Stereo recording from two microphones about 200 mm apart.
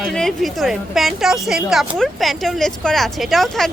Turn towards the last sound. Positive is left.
turn(degrees=0)  # may be behind; listen again after turning